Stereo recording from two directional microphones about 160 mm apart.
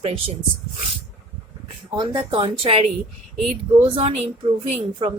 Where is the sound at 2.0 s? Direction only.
30° right (ahead or behind).